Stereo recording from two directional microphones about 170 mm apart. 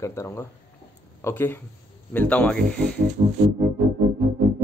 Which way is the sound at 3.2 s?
40° right (ahead or behind).